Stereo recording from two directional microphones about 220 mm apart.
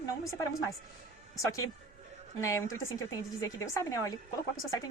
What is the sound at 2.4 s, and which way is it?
A woman's voice, 15° left (ahead or behind).